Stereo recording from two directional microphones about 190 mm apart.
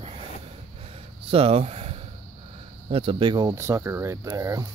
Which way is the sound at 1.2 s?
30° right (ahead or behind).